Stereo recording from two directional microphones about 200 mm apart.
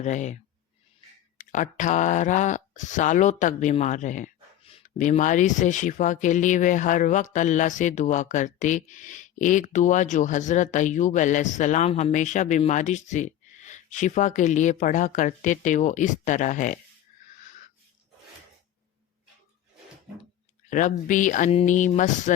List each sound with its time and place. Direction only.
0.0 s speech: 35° left (ahead or behind)
1.5 s speech: 40° left (ahead or behind)
17.2 s wheeze: 40° left (ahead or behind)
20.7 s speech: 40° left (ahead or behind)